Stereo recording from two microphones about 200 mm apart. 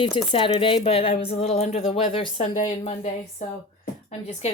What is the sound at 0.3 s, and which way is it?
Speech, 25° left (ahead or behind).